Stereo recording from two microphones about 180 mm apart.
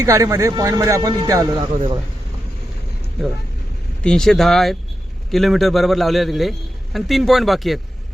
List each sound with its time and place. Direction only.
0.0 s speech: 15° right (ahead or behind)
4.0 s a man's voice: 5° left (ahead or behind)